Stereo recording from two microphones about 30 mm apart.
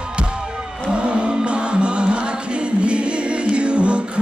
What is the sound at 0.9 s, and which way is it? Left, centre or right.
Music, right.